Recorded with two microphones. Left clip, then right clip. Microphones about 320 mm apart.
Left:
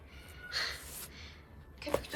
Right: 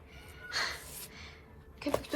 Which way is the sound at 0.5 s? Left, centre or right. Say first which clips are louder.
Right 2 dB; centre.